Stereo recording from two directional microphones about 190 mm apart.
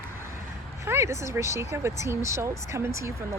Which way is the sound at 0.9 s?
15° right (ahead or behind).